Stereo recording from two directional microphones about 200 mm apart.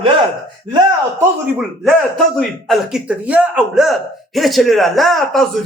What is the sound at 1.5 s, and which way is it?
Speech, centre (ahead or behind).